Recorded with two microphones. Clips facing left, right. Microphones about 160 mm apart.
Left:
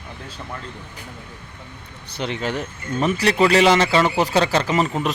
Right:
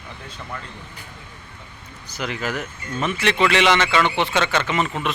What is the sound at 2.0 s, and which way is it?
Speech, 30° left (ahead or behind).